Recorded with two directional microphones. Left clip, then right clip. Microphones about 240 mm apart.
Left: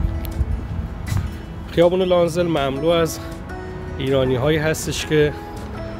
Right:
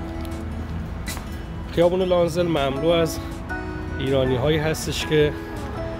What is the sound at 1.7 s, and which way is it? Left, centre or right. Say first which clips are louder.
Speech: left 3 dB; left.